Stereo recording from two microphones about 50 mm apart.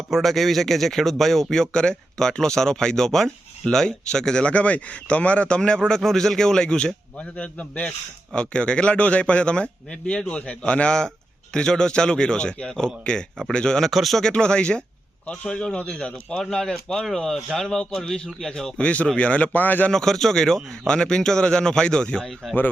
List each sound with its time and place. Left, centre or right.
0.1 s speech: centre
4.4 s a man's voice: left; by 13.9 s centre
13.9 s speech: centre
14.2 s a man's voice: centre
16.4 s speech: centre
18.8 s a man's voice: left
19.9 s speech: centre